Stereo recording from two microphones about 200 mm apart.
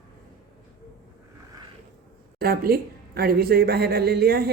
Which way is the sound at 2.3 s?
50° right (ahead or behind).